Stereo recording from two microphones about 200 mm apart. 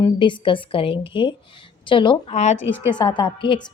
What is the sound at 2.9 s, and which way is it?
Speech, 20° left (ahead or behind).